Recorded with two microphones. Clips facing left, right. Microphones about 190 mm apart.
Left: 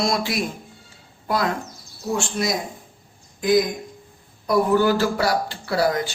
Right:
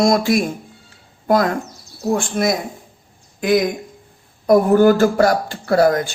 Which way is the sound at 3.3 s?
70° right (ahead or behind).